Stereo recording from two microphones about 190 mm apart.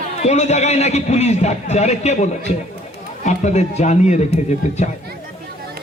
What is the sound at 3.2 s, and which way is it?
A man's voice, 35° left (ahead or behind).